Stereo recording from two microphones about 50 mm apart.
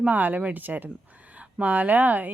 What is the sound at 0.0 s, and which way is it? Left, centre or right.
A woman's voice, right.